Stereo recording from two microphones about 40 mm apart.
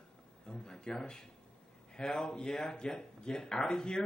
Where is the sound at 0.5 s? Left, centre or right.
Centre.